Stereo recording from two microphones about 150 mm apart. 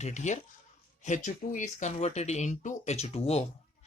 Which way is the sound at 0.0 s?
50° left (ahead or behind).